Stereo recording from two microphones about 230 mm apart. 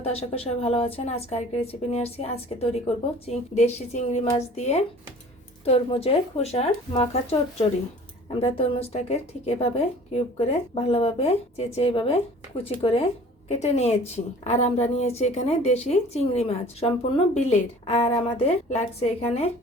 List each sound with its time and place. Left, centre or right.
0.0 s speech: left